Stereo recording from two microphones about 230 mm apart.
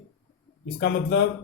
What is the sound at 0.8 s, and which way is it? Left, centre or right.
Speech, left.